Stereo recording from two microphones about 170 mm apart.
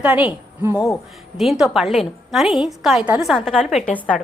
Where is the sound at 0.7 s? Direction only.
20° left (ahead or behind).